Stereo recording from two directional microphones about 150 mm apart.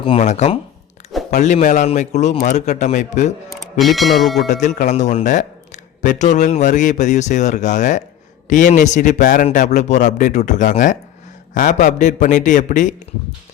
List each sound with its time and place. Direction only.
0.0 s speech: 40° left (ahead or behind)
3.5 s speech: centre (ahead or behind)
4.4 s a man's voice: 55° left (ahead or behind)